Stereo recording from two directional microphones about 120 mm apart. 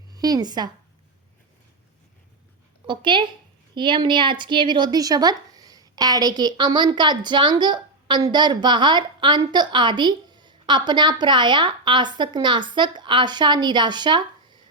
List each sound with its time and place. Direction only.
0.1 s speech: 30° right (ahead or behind)
2.8 s a woman's voice: 40° right (ahead or behind)